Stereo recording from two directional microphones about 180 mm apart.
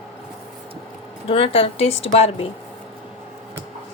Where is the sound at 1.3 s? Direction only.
30° left (ahead or behind).